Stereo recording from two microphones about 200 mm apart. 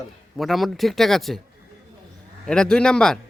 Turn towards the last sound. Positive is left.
turn(degrees=5)  # may be behind; listen again after turning